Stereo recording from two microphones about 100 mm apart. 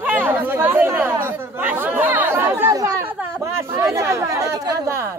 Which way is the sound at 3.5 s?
30° right (ahead or behind).